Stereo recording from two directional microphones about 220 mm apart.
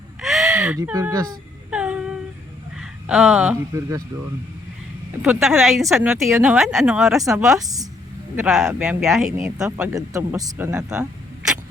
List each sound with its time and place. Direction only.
0.2 s a sound: centre (ahead or behind)
0.8 s speech: 10° right (ahead or behind)
1.7 s humming: 5° right (ahead or behind)
2.7 s speech: 5° right (ahead or behind)
5.2 s speech: 5° right (ahead or behind)
7.2 s speech: 15° right (ahead or behind)
8.4 s speech: centre (ahead or behind)